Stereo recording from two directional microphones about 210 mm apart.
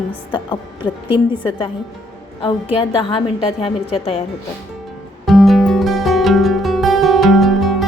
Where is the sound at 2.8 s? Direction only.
25° left (ahead or behind).